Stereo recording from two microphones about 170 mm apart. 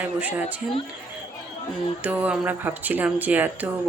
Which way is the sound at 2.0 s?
5° right (ahead or behind).